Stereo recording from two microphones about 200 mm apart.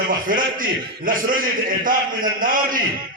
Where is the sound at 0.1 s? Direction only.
45° right (ahead or behind).